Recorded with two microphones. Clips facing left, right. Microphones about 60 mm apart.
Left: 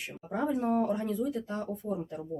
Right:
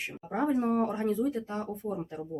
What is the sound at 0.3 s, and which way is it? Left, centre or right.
Speech, right.